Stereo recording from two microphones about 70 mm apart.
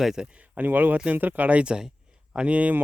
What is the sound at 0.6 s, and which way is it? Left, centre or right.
Speech, right.